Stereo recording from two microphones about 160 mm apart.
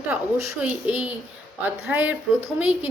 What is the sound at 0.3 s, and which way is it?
Speech, 10° right (ahead or behind).